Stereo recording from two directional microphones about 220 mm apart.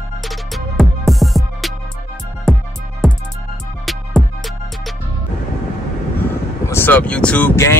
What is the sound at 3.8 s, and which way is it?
Music, centre (ahead or behind).